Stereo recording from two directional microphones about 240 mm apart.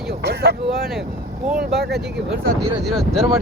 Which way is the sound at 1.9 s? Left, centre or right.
Right.